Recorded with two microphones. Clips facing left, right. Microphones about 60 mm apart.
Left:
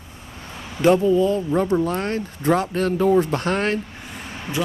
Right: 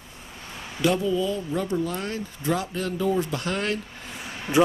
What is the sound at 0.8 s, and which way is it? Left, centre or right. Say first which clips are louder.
Speech: left 7 dB; left.